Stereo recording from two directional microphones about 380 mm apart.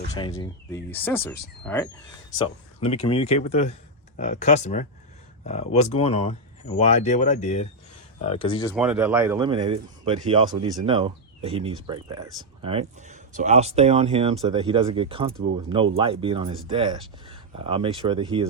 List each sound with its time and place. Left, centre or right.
0.1 s speech: centre
2.8 s speech: centre
8.7 s speech: centre